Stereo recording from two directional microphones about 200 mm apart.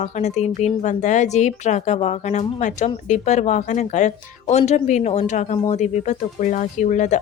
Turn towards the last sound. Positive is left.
turn(degrees=35)  # may be behind; listen again after turning